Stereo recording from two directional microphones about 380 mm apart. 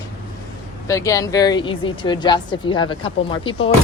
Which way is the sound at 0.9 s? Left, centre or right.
Centre.